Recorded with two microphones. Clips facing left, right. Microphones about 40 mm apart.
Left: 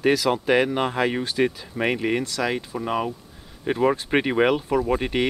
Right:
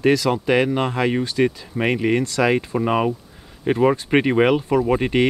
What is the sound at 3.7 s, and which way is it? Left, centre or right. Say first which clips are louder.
Speech: right 4 dB; centre.